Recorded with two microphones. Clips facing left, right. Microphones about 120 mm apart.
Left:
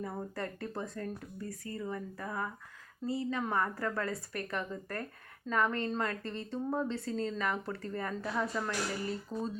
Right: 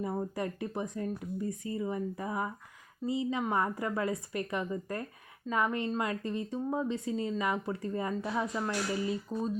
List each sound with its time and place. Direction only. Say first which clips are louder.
0.0 s a woman's voice: right 5 dB; 15° right (ahead or behind)